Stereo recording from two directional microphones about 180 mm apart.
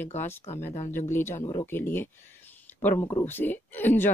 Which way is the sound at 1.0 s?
15° left (ahead or behind).